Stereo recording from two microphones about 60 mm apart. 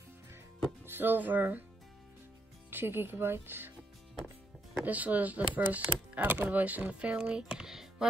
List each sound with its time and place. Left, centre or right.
0.8 s speech: right
2.7 s speech: right
4.8 s speech: right; by 8.1 s centre